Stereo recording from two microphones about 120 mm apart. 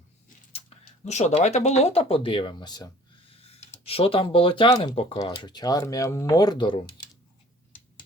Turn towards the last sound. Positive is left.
turn(degrees=40)  # may be behind; listen again after turning